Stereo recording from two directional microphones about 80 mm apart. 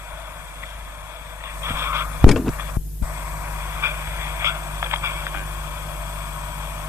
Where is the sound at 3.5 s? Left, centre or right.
Right.